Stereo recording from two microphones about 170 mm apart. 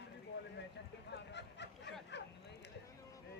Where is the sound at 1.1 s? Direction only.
90° left.